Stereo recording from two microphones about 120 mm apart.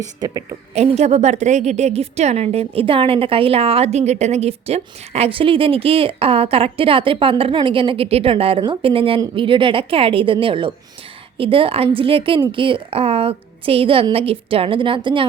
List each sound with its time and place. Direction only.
0.9 s a woman's voice: 65° right (ahead or behind); by 15.3 s 45° right (ahead or behind)